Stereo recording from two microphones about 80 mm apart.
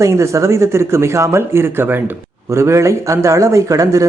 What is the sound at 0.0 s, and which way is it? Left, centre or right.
A man's voice, right.